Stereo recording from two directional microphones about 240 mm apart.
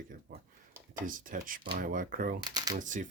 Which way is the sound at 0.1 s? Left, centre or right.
Right.